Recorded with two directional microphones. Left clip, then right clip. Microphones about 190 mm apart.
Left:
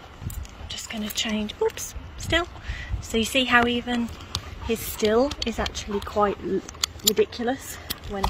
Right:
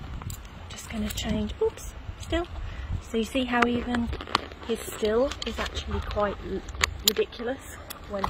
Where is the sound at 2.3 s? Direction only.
5° left (ahead or behind).